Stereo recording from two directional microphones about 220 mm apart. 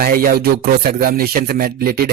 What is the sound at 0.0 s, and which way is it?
Speech, 40° right (ahead or behind).